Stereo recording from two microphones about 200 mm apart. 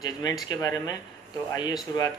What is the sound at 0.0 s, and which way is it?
Speech, 20° left (ahead or behind).